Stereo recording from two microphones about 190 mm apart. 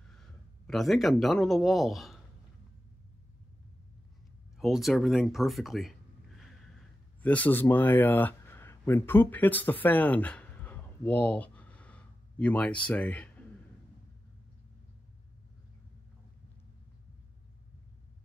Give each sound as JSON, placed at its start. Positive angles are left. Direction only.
{"t": 0.1, "sound": "speech", "side_deg": 0}
{"t": 4.6, "sound": "speech", "side_deg": 0}
{"t": 7.2, "sound": "a man's voice", "side_deg": 10}